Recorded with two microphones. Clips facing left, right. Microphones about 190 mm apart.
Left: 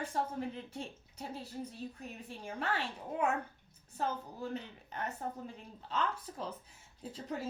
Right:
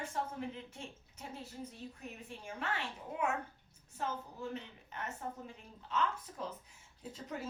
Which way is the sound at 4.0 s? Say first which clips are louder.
Left 3 dB; 35° left (ahead or behind).